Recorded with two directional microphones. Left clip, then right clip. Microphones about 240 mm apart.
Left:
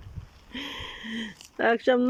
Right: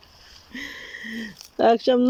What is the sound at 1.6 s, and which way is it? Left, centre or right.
Speech, centre.